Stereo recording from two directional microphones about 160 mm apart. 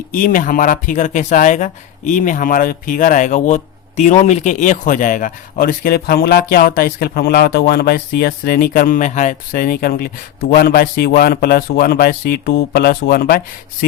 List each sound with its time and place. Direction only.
0.1 s a man's voice: 60° left (ahead or behind); by 13.4 s 80° left